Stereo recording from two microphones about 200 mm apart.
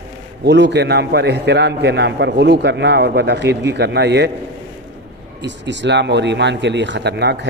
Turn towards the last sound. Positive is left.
turn(degrees=-55)  # may be behind; listen again after turning